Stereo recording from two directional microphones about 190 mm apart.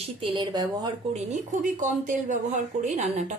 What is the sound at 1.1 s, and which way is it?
Speech, 40° right (ahead or behind).